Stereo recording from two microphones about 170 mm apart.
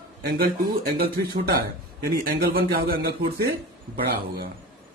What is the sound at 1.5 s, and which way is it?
Speech, 65° right (ahead or behind).